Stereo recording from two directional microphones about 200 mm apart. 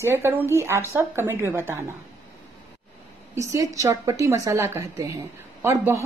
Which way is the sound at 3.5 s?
15° right (ahead or behind).